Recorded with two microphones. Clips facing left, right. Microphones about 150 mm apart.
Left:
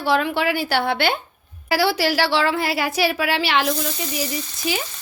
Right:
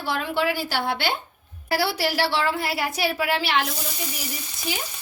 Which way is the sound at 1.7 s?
90° left.